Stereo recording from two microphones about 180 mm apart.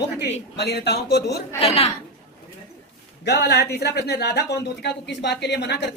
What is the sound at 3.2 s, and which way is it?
Speech, 65° left (ahead or behind).